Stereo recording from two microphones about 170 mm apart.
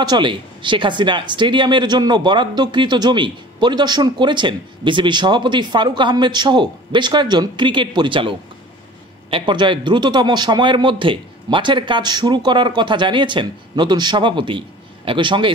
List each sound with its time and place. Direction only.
0.0 s speech: 25° right (ahead or behind)